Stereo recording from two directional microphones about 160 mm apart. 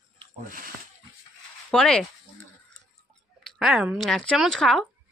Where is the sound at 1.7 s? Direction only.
5° left (ahead or behind).